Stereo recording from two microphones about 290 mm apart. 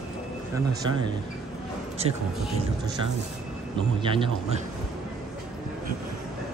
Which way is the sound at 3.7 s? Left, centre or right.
Centre.